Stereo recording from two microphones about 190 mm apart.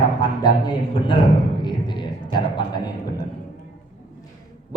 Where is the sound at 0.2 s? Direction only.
20° left (ahead or behind).